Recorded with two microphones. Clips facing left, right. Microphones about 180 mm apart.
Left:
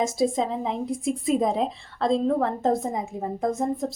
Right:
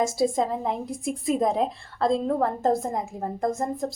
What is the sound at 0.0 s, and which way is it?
A woman's voice, centre (ahead or behind).